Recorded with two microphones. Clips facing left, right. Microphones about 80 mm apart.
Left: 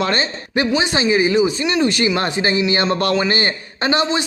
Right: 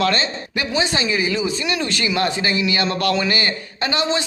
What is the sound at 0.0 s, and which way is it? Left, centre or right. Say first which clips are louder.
A man's voice: even; left.